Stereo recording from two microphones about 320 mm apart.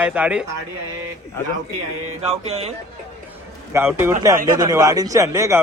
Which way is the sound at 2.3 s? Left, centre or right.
Centre.